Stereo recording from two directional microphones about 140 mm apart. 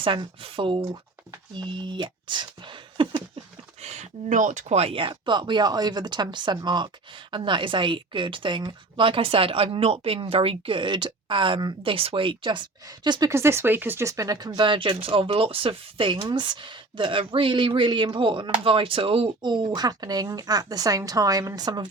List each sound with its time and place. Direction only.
0.0 s speech: 40° right (ahead or behind)
3.8 s speech: 55° right (ahead or behind); by 21.8 s 30° right (ahead or behind)